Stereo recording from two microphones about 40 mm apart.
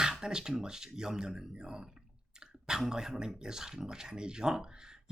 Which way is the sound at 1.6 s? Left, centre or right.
Centre.